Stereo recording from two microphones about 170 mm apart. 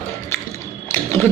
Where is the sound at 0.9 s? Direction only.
15° left (ahead or behind).